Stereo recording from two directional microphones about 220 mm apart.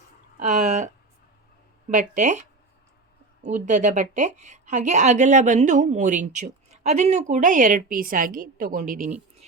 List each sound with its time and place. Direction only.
0.3 s a woman's voice: 35° right (ahead or behind)
1.9 s a woman's voice: 35° right (ahead or behind)
3.4 s a woman's voice: 35° right (ahead or behind)